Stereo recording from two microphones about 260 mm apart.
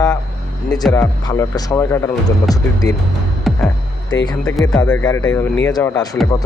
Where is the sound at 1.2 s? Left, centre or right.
Centre.